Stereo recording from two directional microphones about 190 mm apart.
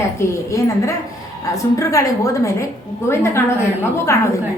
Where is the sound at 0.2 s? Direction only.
15° left (ahead or behind).